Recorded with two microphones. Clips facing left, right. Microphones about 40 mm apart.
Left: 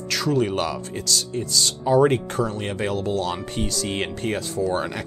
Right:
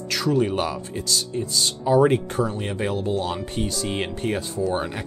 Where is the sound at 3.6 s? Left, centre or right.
Left.